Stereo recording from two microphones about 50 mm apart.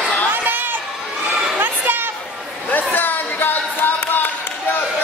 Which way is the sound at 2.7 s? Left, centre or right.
Left.